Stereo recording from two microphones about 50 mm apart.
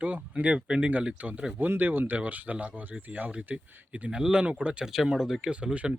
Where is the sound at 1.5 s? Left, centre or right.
Right.